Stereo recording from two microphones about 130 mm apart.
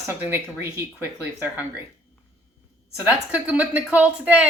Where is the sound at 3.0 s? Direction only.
10° right (ahead or behind).